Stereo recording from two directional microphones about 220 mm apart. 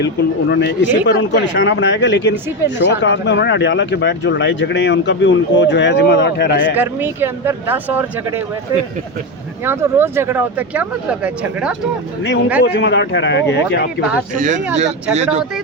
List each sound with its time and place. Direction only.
0.5 s speech: 50° left (ahead or behind)
6.7 s speech: 10° right (ahead or behind)
9.6 s speech: 10° right (ahead or behind)
12.6 s speech: 50° left (ahead or behind)
14.3 s speech: 35° right (ahead or behind)